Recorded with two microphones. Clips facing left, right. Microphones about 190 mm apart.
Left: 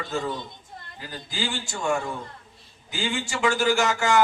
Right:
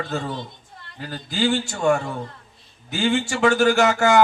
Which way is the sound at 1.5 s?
60° right (ahead or behind).